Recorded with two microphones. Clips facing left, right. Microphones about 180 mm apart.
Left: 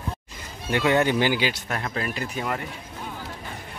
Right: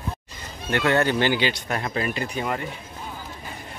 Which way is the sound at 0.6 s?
10° left (ahead or behind).